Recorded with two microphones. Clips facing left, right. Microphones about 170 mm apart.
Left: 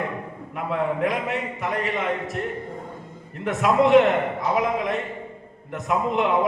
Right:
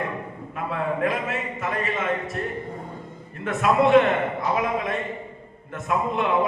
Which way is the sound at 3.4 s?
20° left (ahead or behind).